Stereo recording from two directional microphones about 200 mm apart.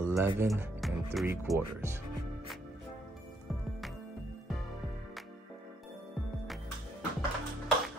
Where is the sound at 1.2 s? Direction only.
10° right (ahead or behind).